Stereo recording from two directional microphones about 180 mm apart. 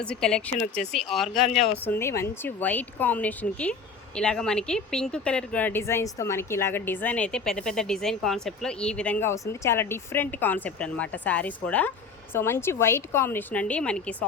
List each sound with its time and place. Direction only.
0.0 s speech: 5° left (ahead or behind)
1.5 s speech: 40° left (ahead or behind)
1.8 s speech: 10° left (ahead or behind)